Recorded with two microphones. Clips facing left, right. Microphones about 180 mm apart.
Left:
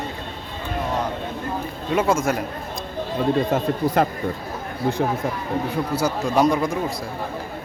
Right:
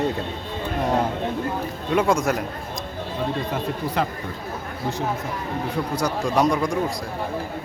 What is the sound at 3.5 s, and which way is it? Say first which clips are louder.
Speech: left 5 dB; 45° left (ahead or behind).